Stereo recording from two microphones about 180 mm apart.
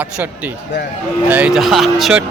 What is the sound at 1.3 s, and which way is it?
Speech, 10° right (ahead or behind).